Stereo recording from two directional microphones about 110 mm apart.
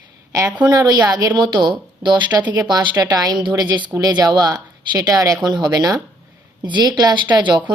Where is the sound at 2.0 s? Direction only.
45° right (ahead or behind).